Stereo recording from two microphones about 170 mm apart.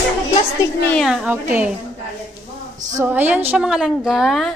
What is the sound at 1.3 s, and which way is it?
Speech, 10° right (ahead or behind).